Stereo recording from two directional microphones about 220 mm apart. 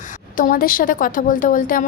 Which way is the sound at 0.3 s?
40° left (ahead or behind).